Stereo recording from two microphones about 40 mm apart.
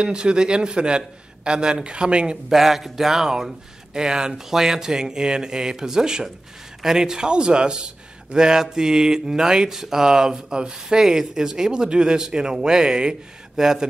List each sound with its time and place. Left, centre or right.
0.0 s a man's voice: right
2.5 s speech: centre